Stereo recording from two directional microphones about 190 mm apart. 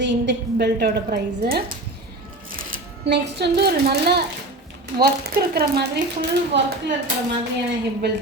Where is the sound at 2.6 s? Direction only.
50° right (ahead or behind); by 6.7 s 65° right (ahead or behind).